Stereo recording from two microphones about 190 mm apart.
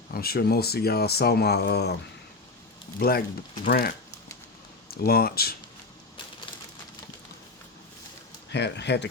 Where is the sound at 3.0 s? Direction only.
55° left (ahead or behind).